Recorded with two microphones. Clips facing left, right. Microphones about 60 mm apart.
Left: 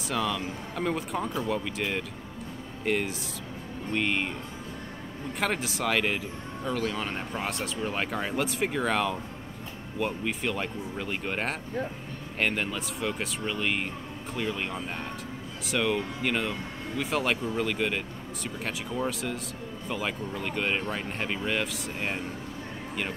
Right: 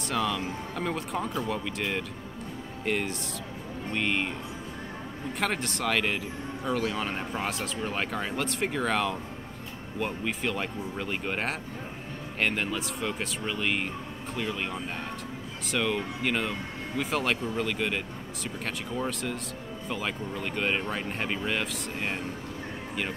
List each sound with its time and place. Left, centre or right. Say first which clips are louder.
0.1 s speech: even; centre
5.4 s speech: left 1 dB; centre